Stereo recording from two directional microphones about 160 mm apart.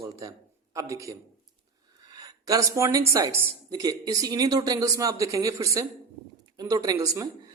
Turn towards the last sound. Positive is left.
turn(degrees=-20)  # may be behind; listen again after turning